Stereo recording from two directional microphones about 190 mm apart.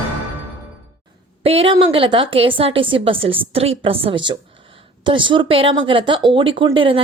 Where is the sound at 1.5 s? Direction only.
30° right (ahead or behind).